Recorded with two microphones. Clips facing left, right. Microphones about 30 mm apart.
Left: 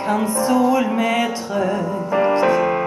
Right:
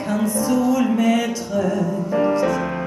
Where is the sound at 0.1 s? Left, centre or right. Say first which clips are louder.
Left 2 dB; left.